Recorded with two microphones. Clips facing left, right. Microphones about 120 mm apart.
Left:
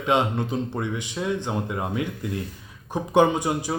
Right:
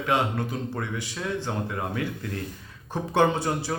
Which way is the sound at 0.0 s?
20° left (ahead or behind).